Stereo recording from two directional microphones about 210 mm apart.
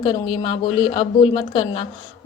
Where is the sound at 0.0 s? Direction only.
25° left (ahead or behind).